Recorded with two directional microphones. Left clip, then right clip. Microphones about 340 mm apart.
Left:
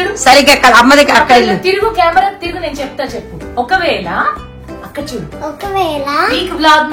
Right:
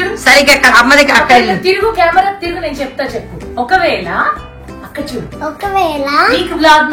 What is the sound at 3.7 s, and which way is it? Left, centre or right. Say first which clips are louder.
Speech: right 2 dB; centre.